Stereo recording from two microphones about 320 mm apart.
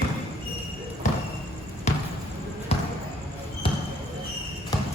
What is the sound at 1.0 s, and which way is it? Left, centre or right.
Basketball bounce, left.